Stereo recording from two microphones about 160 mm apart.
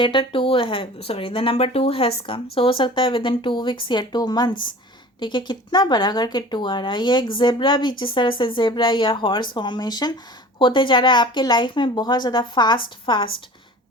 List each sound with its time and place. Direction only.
0.0 s a woman's voice: 30° left (ahead or behind)